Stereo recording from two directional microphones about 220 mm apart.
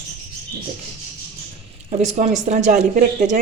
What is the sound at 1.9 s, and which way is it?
Speech, 30° right (ahead or behind).